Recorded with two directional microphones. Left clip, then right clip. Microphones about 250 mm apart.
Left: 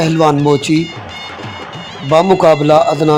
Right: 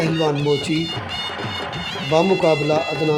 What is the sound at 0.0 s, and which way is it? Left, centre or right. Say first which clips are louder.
Speech: left 8 dB; left.